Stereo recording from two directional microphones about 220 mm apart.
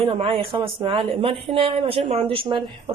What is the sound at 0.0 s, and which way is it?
Speech, 25° right (ahead or behind).